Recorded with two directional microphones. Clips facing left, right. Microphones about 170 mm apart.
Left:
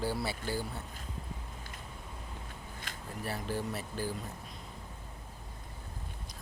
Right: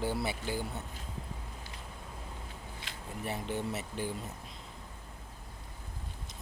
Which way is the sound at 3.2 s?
20° right (ahead or behind).